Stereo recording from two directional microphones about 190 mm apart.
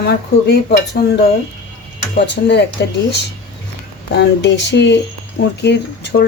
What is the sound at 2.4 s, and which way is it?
Speech, 60° left (ahead or behind).